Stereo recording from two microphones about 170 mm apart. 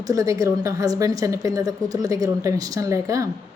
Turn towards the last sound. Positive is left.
turn(degrees=-20)  # may be behind; listen again after turning